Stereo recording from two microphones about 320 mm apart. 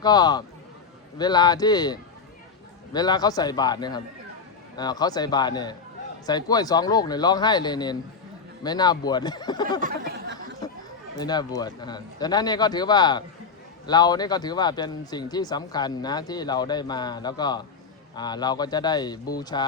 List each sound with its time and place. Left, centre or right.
0.0 s speech: centre
9.8 s chatter: right
11.2 s speech: centre